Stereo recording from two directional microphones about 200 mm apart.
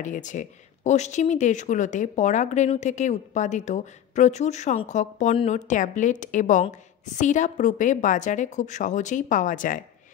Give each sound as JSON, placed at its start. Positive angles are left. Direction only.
{"t": 0.0, "sound": "speech", "side_deg": 40}